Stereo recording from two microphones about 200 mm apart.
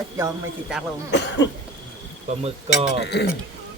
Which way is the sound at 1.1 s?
60° left (ahead or behind).